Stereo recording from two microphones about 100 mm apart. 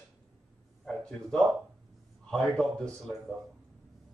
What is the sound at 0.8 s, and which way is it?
Speech, 10° left (ahead or behind).